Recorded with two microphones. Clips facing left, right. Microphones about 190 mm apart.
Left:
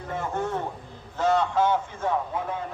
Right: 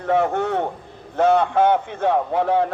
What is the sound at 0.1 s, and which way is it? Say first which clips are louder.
Speech: right 10 dB; 70° right (ahead or behind).